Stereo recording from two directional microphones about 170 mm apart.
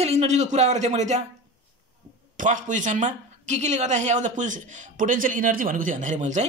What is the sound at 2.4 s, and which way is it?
Speech, 50° right (ahead or behind).